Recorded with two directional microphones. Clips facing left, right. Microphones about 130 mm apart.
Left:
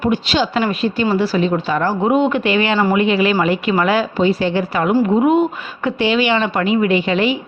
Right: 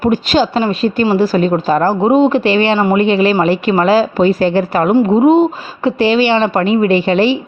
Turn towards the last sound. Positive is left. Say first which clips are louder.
# right 4 dB
turn(degrees=-35)  # may be behind; listen again after turning